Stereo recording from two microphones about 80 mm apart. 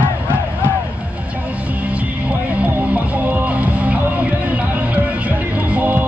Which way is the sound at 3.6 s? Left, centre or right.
Centre.